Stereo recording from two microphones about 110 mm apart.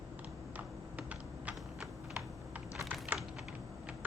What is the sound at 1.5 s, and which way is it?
Typing, 10° right (ahead or behind).